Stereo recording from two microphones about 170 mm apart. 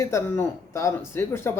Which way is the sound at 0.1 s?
15° left (ahead or behind).